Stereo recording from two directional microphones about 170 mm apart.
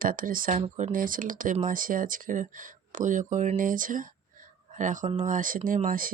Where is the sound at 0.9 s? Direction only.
55° right (ahead or behind).